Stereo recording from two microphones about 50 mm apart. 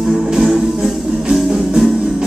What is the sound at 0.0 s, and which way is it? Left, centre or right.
Music, centre.